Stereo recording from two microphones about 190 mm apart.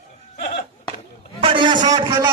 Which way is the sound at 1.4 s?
25° right (ahead or behind).